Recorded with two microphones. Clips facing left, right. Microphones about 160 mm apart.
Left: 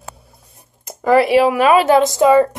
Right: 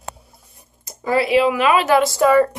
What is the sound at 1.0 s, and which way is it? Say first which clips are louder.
Speech: left 4 dB; 45° left (ahead or behind).